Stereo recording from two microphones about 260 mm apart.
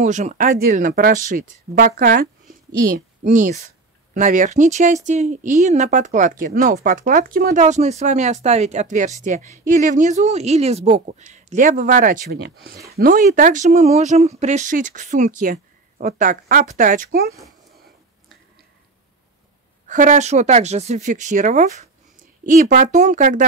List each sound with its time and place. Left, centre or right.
0.0 s speech: right
19.9 s speech: right